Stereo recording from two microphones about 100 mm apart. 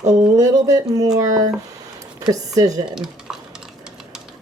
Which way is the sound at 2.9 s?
5° right (ahead or behind).